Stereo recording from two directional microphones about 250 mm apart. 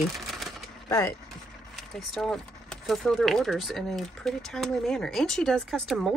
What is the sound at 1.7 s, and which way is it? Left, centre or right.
Speech, centre.